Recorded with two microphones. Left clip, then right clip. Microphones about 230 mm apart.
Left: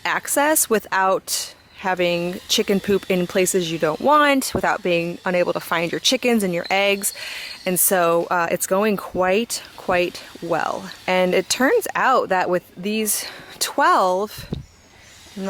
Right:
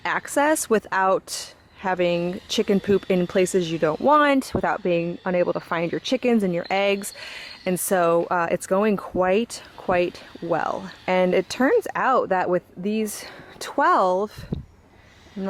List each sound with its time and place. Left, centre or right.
0.0 s speech: centre
9.0 s speech: centre
9.2 s speech: centre
15.4 s speech: centre